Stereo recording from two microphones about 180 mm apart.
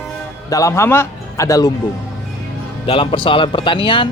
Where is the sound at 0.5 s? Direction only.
15° left (ahead or behind).